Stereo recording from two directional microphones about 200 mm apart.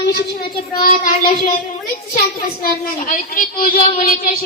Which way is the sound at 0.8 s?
45° left (ahead or behind).